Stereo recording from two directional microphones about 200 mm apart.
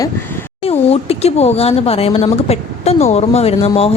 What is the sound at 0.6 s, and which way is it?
A woman's voice, 30° left (ahead or behind).